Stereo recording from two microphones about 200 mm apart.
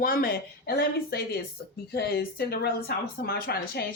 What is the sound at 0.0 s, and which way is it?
A woman's voice, 45° left (ahead or behind).